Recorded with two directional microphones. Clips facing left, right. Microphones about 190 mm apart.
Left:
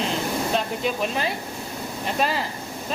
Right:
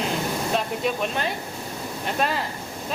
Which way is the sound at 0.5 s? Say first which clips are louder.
Even; centre (ahead or behind).